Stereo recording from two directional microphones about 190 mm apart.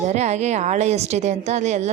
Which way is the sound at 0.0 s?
35° right (ahead or behind).